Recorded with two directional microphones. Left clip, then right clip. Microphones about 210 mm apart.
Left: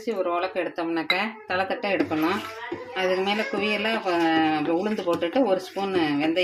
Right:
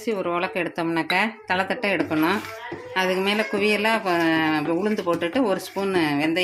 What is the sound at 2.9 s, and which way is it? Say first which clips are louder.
Speech: right 2 dB; 35° right (ahead or behind).